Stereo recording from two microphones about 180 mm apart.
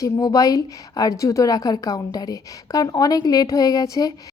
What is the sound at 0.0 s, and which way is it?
A woman's voice, 20° left (ahead or behind).